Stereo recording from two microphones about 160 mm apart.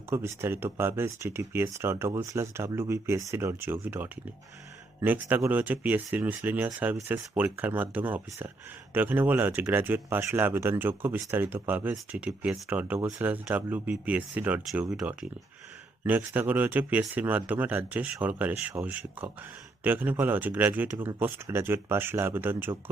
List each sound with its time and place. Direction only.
0.1 s speech: 15° right (ahead or behind)